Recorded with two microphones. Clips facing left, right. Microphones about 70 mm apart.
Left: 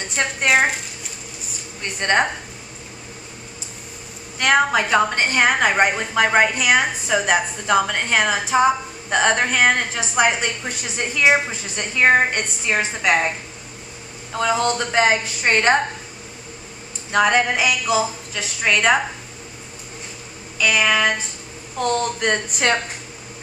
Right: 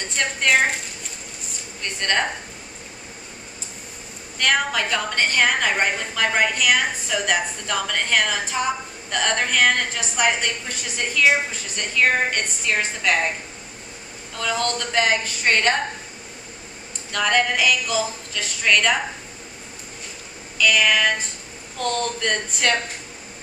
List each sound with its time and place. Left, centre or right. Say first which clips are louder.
0.1 s a woman's voice: left 2 dB; centre
1.8 s a woman's voice: left 4 dB; left
4.4 s a woman's voice: left 4 dB; left
14.3 s a woman's voice: left 5 dB; left
17.1 s a woman's voice: left 4 dB; left
20.5 s a woman's voice: left 1 dB; centre